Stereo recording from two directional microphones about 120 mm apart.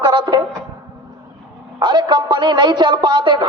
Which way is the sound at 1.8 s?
35° right (ahead or behind).